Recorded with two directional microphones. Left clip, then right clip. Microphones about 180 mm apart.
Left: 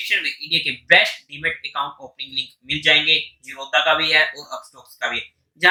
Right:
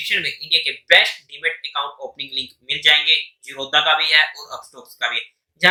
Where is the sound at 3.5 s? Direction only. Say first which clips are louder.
Right 1 dB; 15° right (ahead or behind).